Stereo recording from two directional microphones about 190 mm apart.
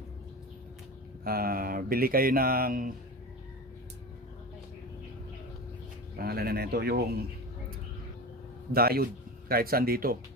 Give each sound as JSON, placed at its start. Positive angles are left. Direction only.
{"t": 1.2, "sound": "speech", "side_deg": -50}
{"t": 6.1, "sound": "speech", "side_deg": -55}
{"t": 8.7, "sound": "speech", "side_deg": -55}